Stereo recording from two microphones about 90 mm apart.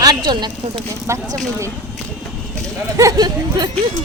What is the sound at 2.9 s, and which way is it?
Speech, 40° right (ahead or behind).